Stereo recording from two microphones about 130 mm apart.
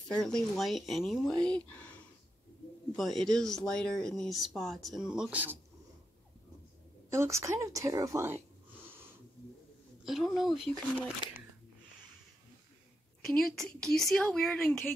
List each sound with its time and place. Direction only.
0.1 s speech: 5° left (ahead or behind)
3.0 s speech: centre (ahead or behind)
7.1 s a woman's voice: 20° right (ahead or behind)
10.0 s speech: centre (ahead or behind)
13.2 s speech: 5° left (ahead or behind)